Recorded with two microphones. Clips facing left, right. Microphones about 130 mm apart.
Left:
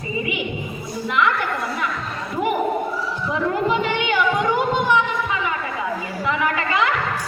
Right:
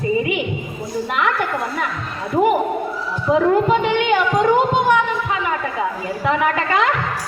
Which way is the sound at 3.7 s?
45° right (ahead or behind).